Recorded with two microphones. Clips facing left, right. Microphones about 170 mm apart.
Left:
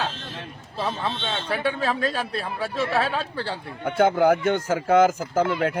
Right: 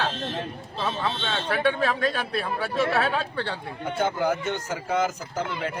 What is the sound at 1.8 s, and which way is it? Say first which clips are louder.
A man's voice: even; 30° left (ahead or behind).